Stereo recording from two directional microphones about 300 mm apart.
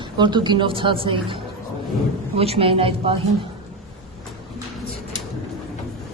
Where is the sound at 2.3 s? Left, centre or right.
Centre.